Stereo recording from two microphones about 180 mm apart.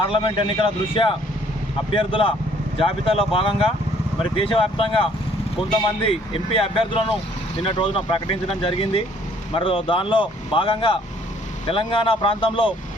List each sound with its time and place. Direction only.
0.1 s speech: 25° left (ahead or behind)
6.1 s speech: 30° left (ahead or behind)